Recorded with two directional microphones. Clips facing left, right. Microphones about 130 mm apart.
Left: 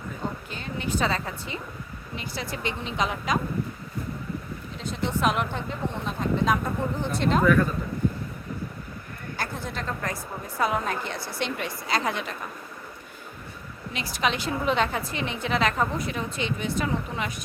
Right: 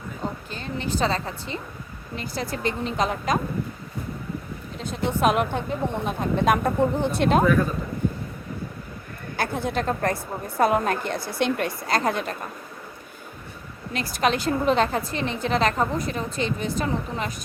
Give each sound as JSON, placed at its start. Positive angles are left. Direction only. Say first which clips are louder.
{"t": 0.5, "sound": "speech", "louder": "right 1 dB", "side_deg": -35}
{"t": 4.8, "sound": "a woman's voice", "louder": "right 3 dB", "side_deg": -50}
{"t": 9.4, "sound": "a woman's voice", "louder": "right 8 dB", "side_deg": -60}
{"t": 13.9, "sound": "a woman's voice", "louder": "right 4 dB", "side_deg": -45}